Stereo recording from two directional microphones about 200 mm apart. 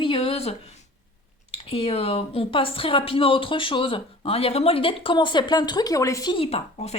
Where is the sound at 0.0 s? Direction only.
25° left (ahead or behind).